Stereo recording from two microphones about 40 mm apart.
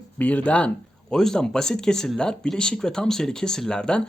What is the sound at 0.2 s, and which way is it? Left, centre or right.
Speech, left.